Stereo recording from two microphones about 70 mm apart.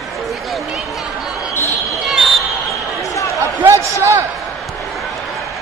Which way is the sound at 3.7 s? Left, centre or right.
Right.